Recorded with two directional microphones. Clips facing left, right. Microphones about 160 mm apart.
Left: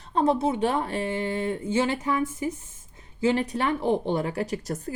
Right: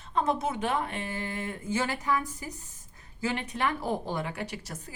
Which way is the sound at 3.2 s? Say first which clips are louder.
Left 6 dB; 35° left (ahead or behind).